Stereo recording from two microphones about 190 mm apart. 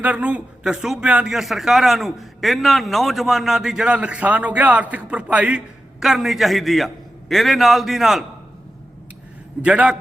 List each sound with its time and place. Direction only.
0.0 s speech: 5° right (ahead or behind)
9.6 s speech: 5° right (ahead or behind)